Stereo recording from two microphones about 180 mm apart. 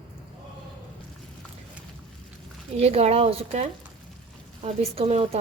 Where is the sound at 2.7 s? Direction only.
35° right (ahead or behind).